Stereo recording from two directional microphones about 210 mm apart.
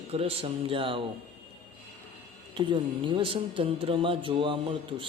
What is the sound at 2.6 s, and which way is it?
Speech, 25° right (ahead or behind).